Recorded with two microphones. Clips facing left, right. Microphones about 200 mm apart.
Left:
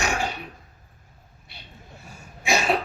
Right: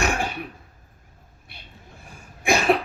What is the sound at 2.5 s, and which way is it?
Cough, 55° right (ahead or behind).